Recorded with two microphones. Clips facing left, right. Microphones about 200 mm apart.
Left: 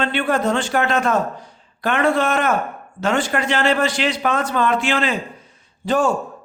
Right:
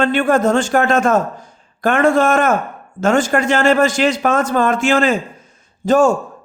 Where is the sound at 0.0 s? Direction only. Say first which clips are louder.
Right 5 dB; 45° right (ahead or behind).